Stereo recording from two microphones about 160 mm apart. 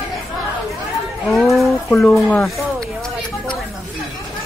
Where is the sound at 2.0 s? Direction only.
Centre (ahead or behind).